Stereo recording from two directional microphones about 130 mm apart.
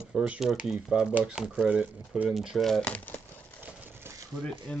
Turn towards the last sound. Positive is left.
turn(degrees=5)  # may be behind; listen again after turning